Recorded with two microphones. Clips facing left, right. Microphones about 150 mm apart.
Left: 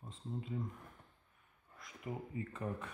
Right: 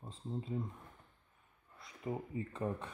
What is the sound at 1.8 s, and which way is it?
Speech, 30° right (ahead or behind).